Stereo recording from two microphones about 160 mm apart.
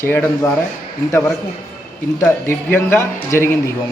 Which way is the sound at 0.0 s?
15° left (ahead or behind).